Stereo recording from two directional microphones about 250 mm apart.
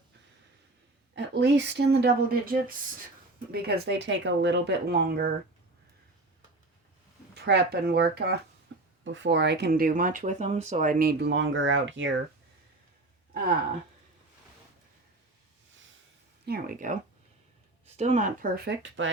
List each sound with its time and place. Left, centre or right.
1.1 s speech: right
7.3 s speech: right
16.5 s speech: right